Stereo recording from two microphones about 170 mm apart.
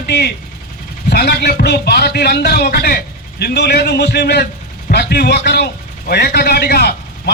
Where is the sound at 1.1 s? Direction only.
70° left (ahead or behind).